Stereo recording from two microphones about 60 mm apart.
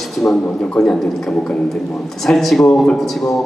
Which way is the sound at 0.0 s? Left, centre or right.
Centre.